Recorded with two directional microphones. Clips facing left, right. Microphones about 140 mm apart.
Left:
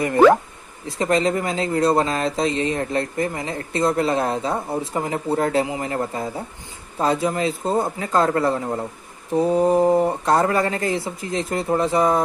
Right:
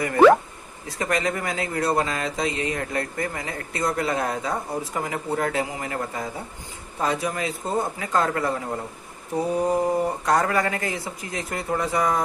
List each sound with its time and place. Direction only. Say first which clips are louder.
0.8 s a man's voice: left 5 dB; 25° left (ahead or behind)